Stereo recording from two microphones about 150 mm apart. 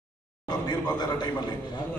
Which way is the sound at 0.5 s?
25° left (ahead or behind).